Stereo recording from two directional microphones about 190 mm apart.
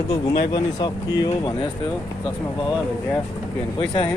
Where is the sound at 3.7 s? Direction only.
25° left (ahead or behind).